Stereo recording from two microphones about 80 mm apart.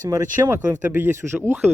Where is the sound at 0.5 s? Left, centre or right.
Right.